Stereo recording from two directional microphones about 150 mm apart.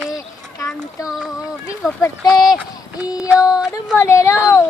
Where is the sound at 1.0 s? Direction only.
5° right (ahead or behind).